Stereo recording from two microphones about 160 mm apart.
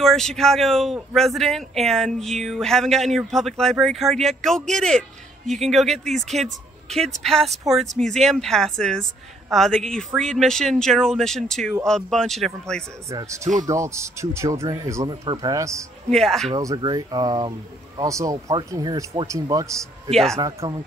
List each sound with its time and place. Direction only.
0.0 s a man's voice: 5° left (ahead or behind)
13.1 s speech: 20° right (ahead or behind)
16.1 s a man's voice: centre (ahead or behind)
16.5 s speech: 25° right (ahead or behind)
20.1 s a man's voice: centre (ahead or behind)
20.3 s speech: 25° right (ahead or behind)